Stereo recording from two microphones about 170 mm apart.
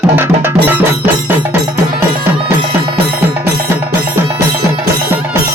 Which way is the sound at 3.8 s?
15° right (ahead or behind).